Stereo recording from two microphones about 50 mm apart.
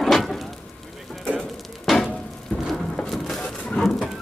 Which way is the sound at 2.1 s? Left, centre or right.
Centre.